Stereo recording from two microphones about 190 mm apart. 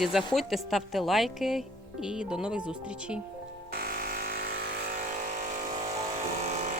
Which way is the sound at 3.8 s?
50° right (ahead or behind).